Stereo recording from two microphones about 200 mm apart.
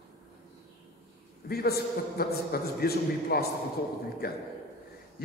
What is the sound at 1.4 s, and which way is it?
A man's voice, 50° left (ahead or behind).